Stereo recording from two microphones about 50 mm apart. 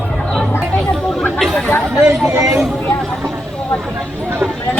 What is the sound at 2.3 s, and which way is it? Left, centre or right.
Speech, right.